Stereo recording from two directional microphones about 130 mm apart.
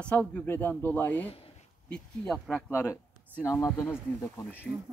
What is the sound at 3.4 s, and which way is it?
Speech, 25° left (ahead or behind).